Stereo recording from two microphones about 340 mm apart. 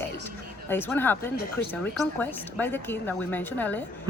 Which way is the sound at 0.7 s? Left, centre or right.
Centre.